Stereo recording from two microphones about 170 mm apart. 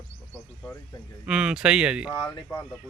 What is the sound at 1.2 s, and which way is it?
Speech, 5° right (ahead or behind).